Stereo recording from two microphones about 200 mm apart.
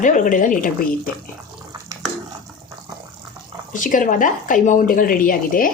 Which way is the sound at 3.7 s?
40° left (ahead or behind).